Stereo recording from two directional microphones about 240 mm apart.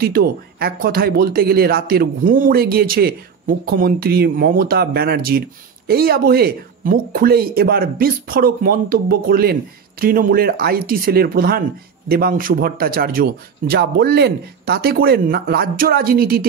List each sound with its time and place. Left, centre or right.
0.0 s speech: right